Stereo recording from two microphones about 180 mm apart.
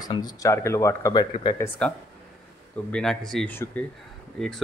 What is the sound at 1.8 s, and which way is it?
Speech, 5° left (ahead or behind).